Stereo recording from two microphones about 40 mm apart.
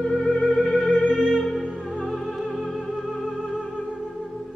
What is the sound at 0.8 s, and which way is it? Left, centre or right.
Music, left.